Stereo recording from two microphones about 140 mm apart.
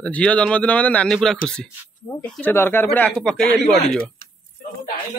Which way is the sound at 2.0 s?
25° left (ahead or behind).